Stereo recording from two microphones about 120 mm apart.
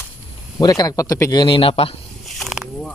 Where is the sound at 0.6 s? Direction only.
30° left (ahead or behind); by 1.9 s 50° left (ahead or behind).